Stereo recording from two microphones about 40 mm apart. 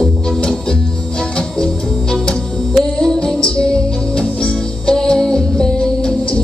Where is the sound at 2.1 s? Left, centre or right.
Left.